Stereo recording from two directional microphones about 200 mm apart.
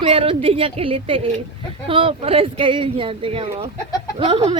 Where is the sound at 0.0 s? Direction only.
25° right (ahead or behind).